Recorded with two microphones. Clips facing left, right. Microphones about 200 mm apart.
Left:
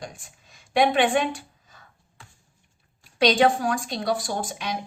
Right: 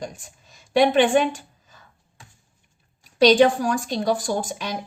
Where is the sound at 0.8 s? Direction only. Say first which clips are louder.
Right 4 dB; 40° right (ahead or behind).